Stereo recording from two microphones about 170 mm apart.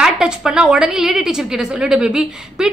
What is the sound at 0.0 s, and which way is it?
A woman's voice, 5° right (ahead or behind).